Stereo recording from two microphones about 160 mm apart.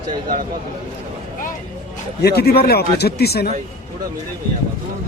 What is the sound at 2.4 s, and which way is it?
Speech, 80° left.